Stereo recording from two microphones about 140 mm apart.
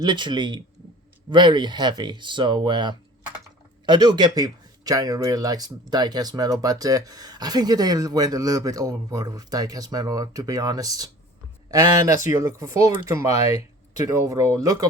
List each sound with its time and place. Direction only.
0.0 s speech: 35° right (ahead or behind)